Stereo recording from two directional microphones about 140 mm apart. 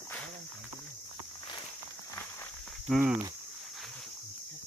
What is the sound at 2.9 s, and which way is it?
Speech, 5° right (ahead or behind).